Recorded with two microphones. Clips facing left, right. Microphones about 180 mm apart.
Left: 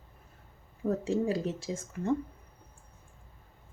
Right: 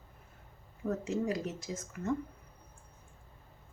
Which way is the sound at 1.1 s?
30° left (ahead or behind).